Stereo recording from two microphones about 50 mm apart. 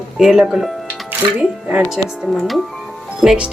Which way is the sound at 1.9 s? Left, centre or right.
Centre.